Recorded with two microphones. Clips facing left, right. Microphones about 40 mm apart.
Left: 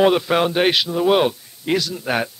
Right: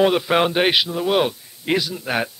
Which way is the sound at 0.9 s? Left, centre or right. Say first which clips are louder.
Left 3 dB; centre.